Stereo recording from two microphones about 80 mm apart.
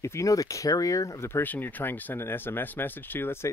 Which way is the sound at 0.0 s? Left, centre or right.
Left.